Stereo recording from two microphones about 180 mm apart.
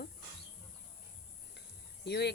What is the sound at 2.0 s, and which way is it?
Chicken, 65° left (ahead or behind).